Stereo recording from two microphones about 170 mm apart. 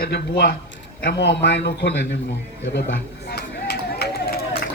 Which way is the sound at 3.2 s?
70° left (ahead or behind).